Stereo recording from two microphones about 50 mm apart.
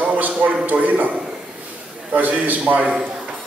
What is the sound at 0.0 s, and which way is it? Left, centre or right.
A man's voice, right.